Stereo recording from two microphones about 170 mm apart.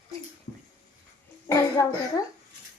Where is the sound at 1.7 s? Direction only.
20° left (ahead or behind).